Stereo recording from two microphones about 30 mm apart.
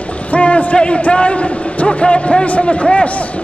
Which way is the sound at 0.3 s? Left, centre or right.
Left.